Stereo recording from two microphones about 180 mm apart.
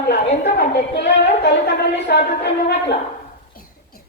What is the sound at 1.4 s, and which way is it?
A woman's voice, 70° left (ahead or behind).